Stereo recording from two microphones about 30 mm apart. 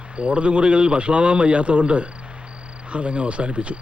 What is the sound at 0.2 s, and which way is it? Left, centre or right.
A man's voice, right.